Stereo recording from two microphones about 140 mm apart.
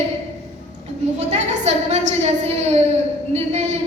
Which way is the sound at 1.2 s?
55° right (ahead or behind).